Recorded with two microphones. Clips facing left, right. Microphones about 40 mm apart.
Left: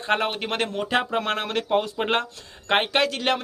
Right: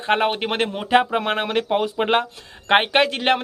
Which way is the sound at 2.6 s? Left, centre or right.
Right.